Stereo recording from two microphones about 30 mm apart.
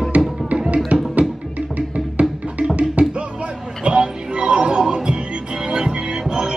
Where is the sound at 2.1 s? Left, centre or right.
Right.